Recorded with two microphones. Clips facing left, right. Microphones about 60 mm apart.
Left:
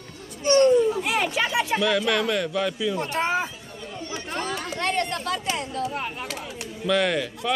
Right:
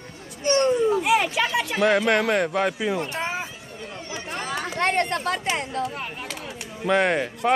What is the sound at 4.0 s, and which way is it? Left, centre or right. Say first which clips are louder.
Chatter: left 2 dB; centre.